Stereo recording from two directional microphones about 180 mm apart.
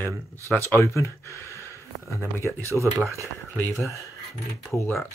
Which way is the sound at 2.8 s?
15° right (ahead or behind).